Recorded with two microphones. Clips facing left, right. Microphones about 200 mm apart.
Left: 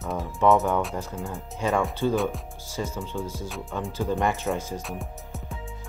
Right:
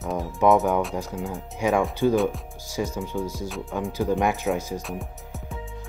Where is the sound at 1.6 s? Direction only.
15° right (ahead or behind).